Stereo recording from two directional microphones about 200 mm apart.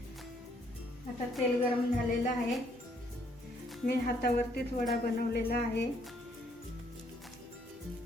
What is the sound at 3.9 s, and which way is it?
A woman's voice, 50° left (ahead or behind).